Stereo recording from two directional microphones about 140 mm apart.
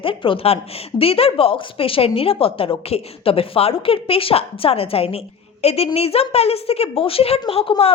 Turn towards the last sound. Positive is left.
turn(degrees=40)  # may be behind; listen again after turning